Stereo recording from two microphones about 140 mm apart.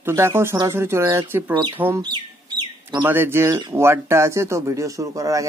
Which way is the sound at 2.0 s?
30° right (ahead or behind).